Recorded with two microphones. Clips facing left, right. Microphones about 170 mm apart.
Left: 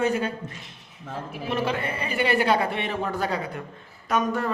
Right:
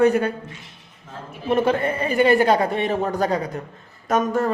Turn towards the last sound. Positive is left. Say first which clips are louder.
# right 4 dB
turn(degrees=-45)  # may be behind; listen again after turning